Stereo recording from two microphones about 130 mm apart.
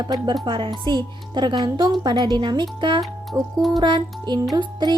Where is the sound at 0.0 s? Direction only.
30° right (ahead or behind).